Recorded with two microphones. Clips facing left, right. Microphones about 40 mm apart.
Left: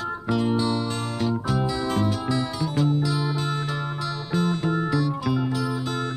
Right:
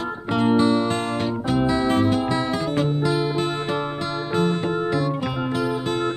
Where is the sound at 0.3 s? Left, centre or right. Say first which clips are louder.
Right 5 dB; right.